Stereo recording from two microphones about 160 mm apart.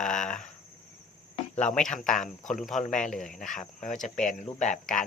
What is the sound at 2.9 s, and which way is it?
Speech, 5° left (ahead or behind).